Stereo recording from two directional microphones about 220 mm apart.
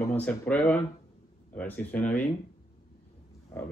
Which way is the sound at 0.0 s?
10° left (ahead or behind).